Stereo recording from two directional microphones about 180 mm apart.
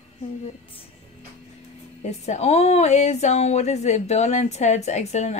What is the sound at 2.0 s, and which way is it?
A woman's voice, 40° left (ahead or behind).